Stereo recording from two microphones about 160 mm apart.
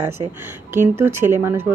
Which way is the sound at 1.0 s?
15° right (ahead or behind).